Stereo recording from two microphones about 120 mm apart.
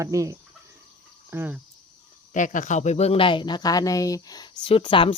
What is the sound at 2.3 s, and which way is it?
Speech, 90° left.